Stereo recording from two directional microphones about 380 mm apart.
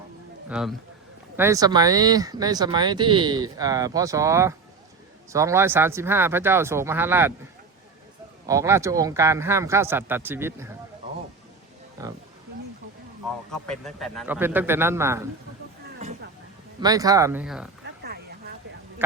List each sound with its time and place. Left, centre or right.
0.4 s a man's voice: centre
8.4 s speech: centre
12.0 s speech: centre
13.5 s speech: centre
16.8 s speech: centre
17.8 s a sound: right